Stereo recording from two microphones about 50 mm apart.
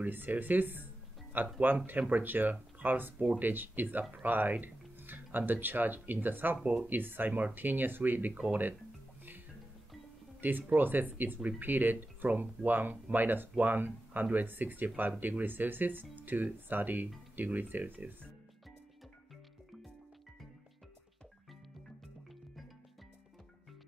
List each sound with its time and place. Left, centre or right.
0.0 s speech: right
10.4 s speech: right